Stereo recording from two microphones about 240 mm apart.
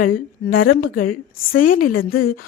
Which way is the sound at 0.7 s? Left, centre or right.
Left.